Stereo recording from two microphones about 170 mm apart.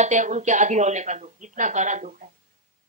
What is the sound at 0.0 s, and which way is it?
Speech, 45° right (ahead or behind).